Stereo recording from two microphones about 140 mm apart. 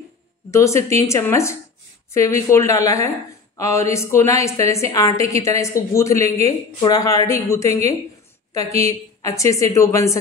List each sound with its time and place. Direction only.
0.5 s a woman's voice: 20° left (ahead or behind)